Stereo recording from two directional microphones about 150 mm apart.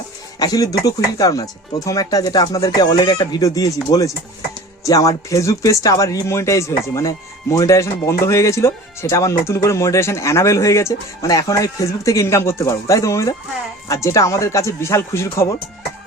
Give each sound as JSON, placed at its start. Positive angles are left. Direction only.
{"t": 0.3, "sound": "speech", "side_deg": 25}